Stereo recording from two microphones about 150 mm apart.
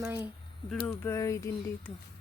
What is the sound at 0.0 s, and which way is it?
Speech, 15° right (ahead or behind).